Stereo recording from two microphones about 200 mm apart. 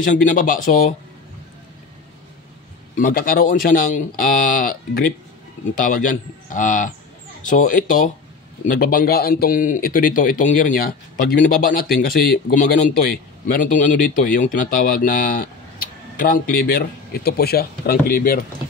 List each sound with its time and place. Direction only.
0.0 s speech: 40° left (ahead or behind)
3.0 s a man's voice: 45° left (ahead or behind)